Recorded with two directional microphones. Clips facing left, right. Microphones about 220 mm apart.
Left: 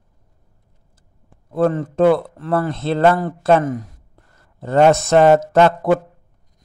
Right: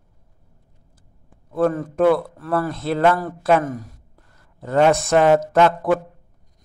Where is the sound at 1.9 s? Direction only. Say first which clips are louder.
Left 2 dB; 25° left (ahead or behind).